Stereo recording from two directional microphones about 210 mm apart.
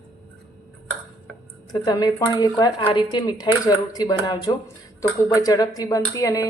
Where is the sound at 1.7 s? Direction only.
20° left (ahead or behind).